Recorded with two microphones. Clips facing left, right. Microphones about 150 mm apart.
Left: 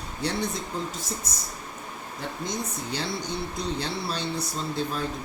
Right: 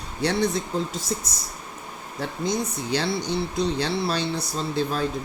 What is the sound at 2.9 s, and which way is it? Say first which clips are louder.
Speech: right 7 dB; 80° right.